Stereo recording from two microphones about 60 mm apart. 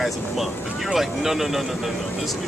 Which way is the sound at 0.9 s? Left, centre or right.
Centre.